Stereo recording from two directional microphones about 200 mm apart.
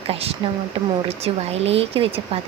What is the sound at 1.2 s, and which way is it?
Speech, 30° right (ahead or behind).